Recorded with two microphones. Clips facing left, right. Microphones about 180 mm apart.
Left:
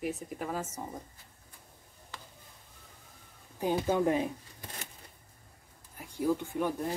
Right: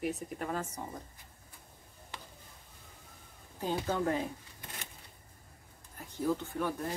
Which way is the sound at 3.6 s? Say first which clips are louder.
Left 4 dB; 15° left (ahead or behind).